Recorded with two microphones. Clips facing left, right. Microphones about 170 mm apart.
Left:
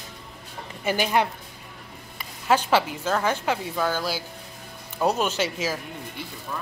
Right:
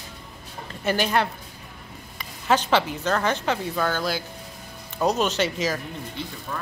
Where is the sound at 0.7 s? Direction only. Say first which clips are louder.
Right 1 dB; 10° left (ahead or behind).